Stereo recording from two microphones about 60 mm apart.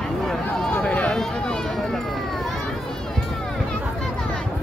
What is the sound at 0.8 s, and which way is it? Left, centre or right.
Run, centre.